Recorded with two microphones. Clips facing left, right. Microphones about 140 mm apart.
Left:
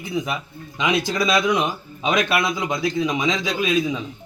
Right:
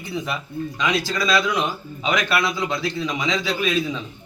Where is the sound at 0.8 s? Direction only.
20° left (ahead or behind).